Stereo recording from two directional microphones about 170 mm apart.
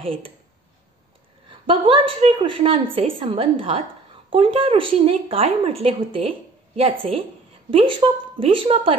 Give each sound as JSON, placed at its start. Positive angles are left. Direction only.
{"t": 0.0, "sound": "a woman's voice", "side_deg": -35}
{"t": 1.5, "sound": "a woman's voice", "side_deg": -30}